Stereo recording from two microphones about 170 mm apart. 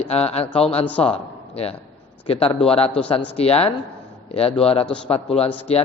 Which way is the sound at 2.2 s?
35° left (ahead or behind).